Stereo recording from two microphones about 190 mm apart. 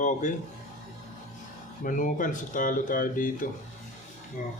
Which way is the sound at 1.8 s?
45° left (ahead or behind).